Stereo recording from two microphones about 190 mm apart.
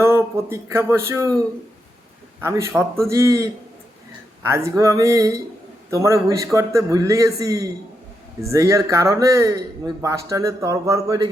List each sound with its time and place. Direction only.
0.0 s a man's voice: 15° right (ahead or behind)
2.4 s a man's voice: 15° right (ahead or behind)
4.4 s a man's voice: 15° right (ahead or behind)